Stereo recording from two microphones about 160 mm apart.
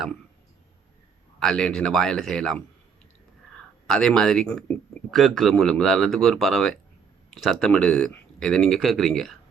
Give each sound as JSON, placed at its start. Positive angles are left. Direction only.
{"t": 1.4, "sound": "speech", "side_deg": 5}
{"t": 3.9, "sound": "speech", "side_deg": 5}